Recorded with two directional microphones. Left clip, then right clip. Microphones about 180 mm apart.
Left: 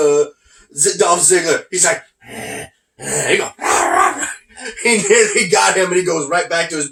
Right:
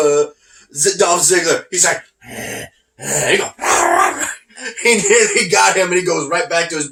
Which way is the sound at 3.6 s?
20° right (ahead or behind).